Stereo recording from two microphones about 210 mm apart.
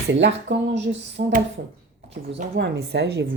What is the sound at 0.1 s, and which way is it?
Speech, 55° right (ahead or behind).